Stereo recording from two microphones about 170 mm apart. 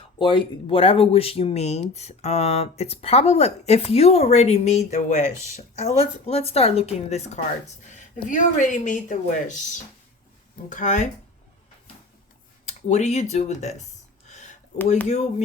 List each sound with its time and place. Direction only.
0.2 s speech: 30° left (ahead or behind); by 11.1 s 45° left (ahead or behind)
12.6 s speech: 45° left (ahead or behind)
14.3 s a sound: 45° left (ahead or behind)
15.0 s speech: 45° left (ahead or behind)